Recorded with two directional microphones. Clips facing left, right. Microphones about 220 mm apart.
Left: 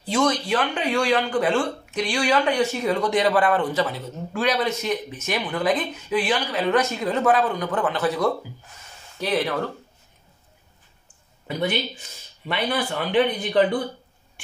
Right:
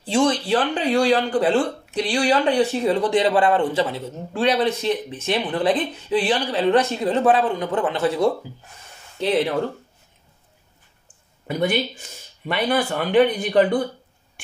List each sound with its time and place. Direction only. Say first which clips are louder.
0.0 s speech: right 3 dB; 30° right (ahead or behind)
12.4 s speech: right 4 dB; 45° right (ahead or behind)